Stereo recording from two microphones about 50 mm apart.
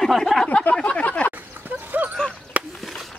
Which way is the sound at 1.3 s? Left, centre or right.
Right.